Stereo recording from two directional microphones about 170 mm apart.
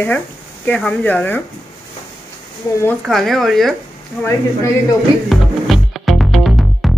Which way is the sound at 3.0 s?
Centre (ahead or behind).